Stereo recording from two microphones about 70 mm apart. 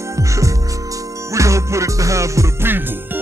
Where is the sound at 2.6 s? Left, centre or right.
Right.